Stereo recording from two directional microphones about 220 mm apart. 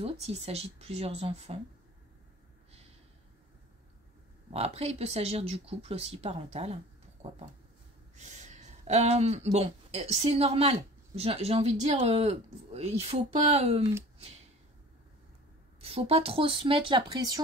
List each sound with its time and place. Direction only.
0.0 s speech: 30° right (ahead or behind)
4.5 s speech: 30° right (ahead or behind)
15.8 s speech: 25° right (ahead or behind)